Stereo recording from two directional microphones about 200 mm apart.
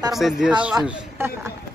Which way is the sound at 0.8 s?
15° right (ahead or behind).